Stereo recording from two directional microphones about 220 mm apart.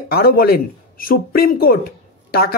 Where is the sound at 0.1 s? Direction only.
45° left (ahead or behind).